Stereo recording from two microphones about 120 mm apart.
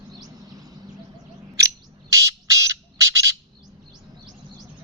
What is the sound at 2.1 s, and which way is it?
Squawk, 25° right (ahead or behind).